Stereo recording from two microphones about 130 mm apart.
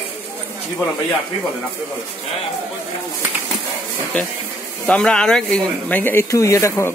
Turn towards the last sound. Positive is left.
turn(degrees=20)  # may be behind; listen again after turning